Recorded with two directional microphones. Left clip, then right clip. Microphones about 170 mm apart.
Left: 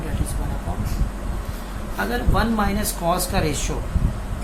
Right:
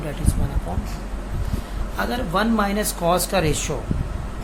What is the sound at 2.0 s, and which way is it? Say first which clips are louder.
Speech: right 1 dB; 65° right (ahead or behind).